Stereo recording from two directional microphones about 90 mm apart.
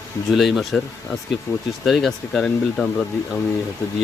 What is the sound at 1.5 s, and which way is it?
Speech, 30° left (ahead or behind).